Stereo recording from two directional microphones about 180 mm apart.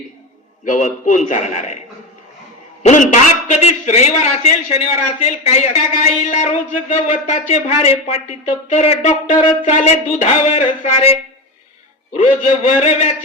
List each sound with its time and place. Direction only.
0.6 s a man's voice: 45° left (ahead or behind)
2.8 s a man's voice: 40° left (ahead or behind)
12.1 s a man's voice: 35° left (ahead or behind)